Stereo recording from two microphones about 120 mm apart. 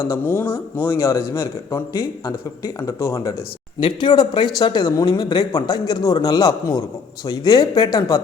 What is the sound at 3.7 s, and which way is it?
A man's voice, 40° left (ahead or behind).